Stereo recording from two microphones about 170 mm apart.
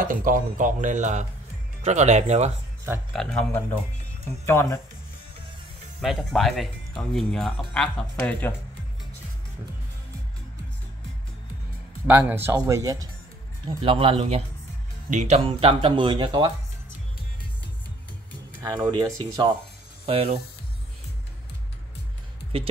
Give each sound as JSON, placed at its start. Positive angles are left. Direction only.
{"t": 0.0, "sound": "speech", "side_deg": -55}
{"t": 3.1, "sound": "a man's voice", "side_deg": 0}
{"t": 4.5, "sound": "speech", "side_deg": 15}
{"t": 5.9, "sound": "speech", "side_deg": 0}
{"t": 12.1, "sound": "speech", "side_deg": -10}
{"t": 13.7, "sound": "speech", "side_deg": -30}
{"t": 18.6, "sound": "speech", "side_deg": -25}
{"t": 20.1, "sound": "speech", "side_deg": -35}